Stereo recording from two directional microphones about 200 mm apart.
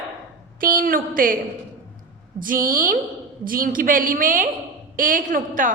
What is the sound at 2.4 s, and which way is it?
A woman's voice, 45° right (ahead or behind).